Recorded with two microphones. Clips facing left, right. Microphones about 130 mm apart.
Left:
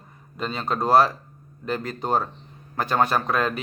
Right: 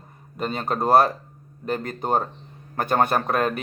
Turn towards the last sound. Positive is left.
turn(degrees=-50)  # may be behind; listen again after turning